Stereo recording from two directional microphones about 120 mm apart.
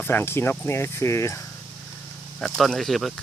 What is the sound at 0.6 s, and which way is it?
Speech, 20° left (ahead or behind).